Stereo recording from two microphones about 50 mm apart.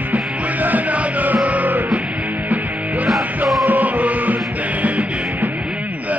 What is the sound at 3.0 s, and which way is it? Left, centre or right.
Music, centre.